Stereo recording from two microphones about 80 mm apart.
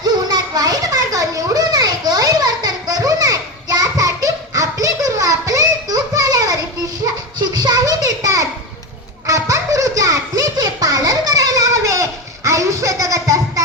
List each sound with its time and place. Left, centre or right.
0.0 s children playing: right
7.3 s a sound: right
9.2 s music: right